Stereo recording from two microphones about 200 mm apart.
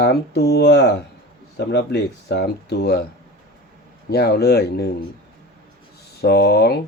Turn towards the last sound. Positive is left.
turn(degrees=55)  # may be behind; listen again after turning